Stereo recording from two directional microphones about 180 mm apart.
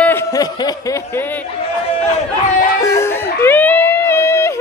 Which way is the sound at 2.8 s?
15° left (ahead or behind).